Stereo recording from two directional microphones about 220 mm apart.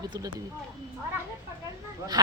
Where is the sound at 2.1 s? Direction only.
15° right (ahead or behind).